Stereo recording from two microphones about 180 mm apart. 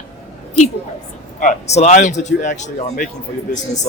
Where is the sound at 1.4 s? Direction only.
40° left (ahead or behind).